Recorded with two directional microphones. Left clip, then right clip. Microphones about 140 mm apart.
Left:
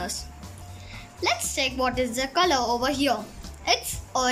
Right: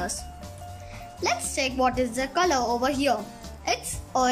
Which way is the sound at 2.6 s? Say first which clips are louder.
Even; 15° right (ahead or behind).